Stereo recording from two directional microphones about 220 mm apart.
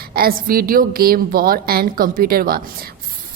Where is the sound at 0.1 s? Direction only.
40° right (ahead or behind).